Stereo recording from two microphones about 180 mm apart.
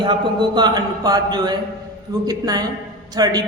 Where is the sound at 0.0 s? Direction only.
25° right (ahead or behind).